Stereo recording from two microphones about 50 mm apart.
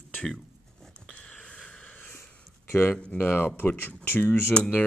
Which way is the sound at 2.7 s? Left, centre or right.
Left.